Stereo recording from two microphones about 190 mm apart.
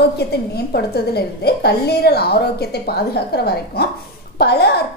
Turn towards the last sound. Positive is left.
turn(degrees=60)  # may be behind; listen again after turning